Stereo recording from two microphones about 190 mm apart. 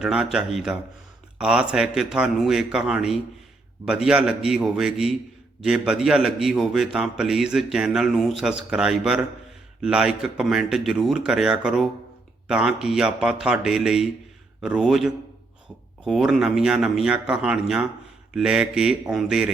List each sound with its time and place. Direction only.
0.0 s a man's voice: 5° right (ahead or behind)